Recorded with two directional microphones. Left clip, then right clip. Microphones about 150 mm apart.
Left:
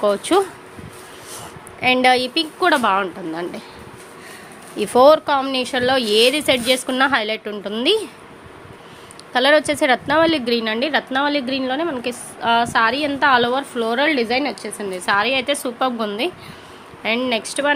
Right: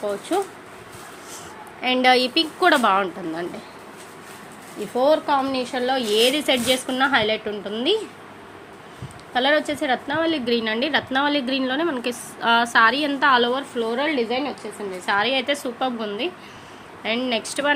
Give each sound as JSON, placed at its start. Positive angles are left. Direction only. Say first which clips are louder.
{"t": 0.0, "sound": "speech", "louder": "left 7 dB", "side_deg": 50}
{"t": 1.8, "sound": "a woman's voice", "louder": "left 2 dB", "side_deg": 20}
{"t": 4.8, "sound": "speech", "louder": "left 7 dB", "side_deg": 50}
{"t": 9.3, "sound": "speech", "louder": "left 5 dB", "side_deg": 35}
{"t": 10.4, "sound": "a woman's voice", "louder": "left 2 dB", "side_deg": 20}
{"t": 15.0, "sound": "a woman's voice", "louder": "left 3 dB", "side_deg": 20}
{"t": 15.6, "sound": "speech", "louder": "left 4 dB", "side_deg": 30}
{"t": 17.0, "sound": "a woman's voice", "louder": "left 4 dB", "side_deg": 20}